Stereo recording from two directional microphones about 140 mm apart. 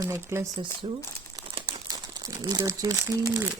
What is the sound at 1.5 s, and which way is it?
Crumpling, 25° right (ahead or behind).